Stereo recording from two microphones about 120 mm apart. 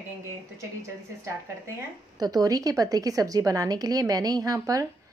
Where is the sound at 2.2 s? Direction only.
30° right (ahead or behind).